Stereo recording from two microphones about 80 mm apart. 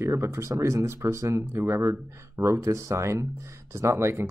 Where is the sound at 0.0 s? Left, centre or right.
Right.